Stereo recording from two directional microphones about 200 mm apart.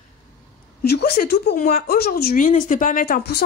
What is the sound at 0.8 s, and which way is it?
A woman's voice, 50° left (ahead or behind).